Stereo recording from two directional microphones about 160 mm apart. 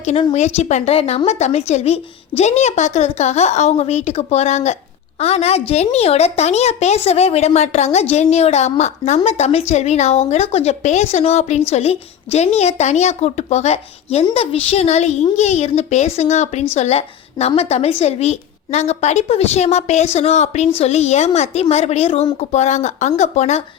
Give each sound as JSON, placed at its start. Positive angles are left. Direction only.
{"t": 0.0, "sound": "a woman's voice", "side_deg": 40}